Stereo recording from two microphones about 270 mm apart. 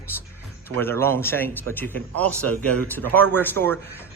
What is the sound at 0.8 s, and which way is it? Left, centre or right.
Speech, centre.